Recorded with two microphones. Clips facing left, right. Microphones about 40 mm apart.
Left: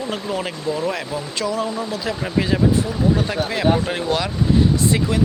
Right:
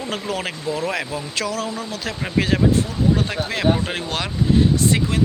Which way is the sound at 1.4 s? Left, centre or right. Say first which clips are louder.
Left 2 dB; right.